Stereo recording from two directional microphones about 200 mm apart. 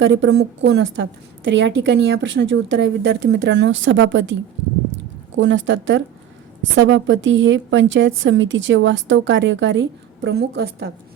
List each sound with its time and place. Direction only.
0.0 s a woman's voice: 65° right (ahead or behind)